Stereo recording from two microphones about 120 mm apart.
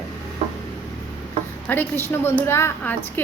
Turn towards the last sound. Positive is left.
turn(degrees=20)  # may be behind; listen again after turning